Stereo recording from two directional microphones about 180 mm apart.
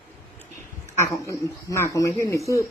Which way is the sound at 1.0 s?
15° left (ahead or behind).